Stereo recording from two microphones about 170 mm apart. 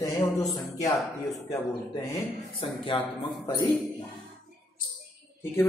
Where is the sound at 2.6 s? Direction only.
30° left (ahead or behind).